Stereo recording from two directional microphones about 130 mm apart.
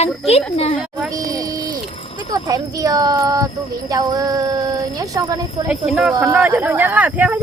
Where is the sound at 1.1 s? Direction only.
25° right (ahead or behind).